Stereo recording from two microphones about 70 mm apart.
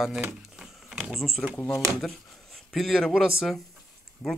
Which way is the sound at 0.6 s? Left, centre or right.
Centre.